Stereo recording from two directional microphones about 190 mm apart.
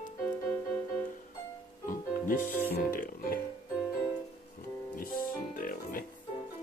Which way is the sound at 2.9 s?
45° left (ahead or behind).